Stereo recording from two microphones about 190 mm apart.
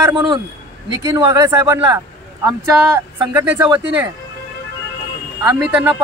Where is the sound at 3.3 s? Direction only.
10° right (ahead or behind).